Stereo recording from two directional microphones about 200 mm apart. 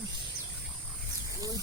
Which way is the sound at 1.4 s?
15° right (ahead or behind).